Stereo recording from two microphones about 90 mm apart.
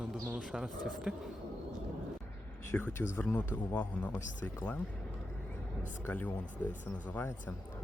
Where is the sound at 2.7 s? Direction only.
15° left (ahead or behind).